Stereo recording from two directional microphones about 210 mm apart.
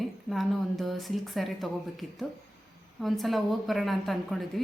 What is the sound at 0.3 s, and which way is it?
Speech, centre (ahead or behind).